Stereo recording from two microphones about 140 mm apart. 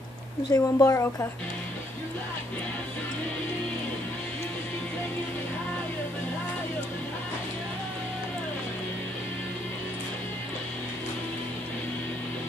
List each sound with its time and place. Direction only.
0.5 s a woman's voice: 25° left (ahead or behind)